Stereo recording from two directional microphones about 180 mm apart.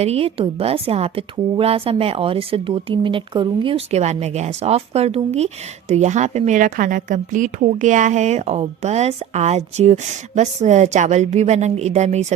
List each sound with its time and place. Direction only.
0.0 s a woman's voice: 35° right (ahead or behind)